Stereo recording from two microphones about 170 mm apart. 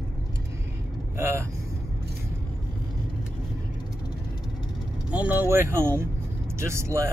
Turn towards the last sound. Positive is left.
turn(degrees=-15)  # may be behind; listen again after turning